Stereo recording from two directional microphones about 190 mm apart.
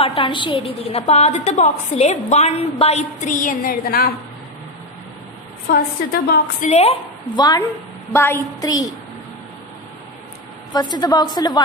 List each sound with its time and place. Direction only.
0.0 s a woman's voice: 25° left (ahead or behind)
3.3 s a woman's voice: 45° left (ahead or behind)
6.2 s a woman's voice: 50° left (ahead or behind)
6.7 s a woman's voice: 30° left (ahead or behind)
10.7 s a woman's voice: 20° left (ahead or behind)